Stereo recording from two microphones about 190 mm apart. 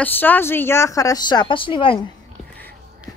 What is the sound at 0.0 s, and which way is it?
Speech, 10° left (ahead or behind).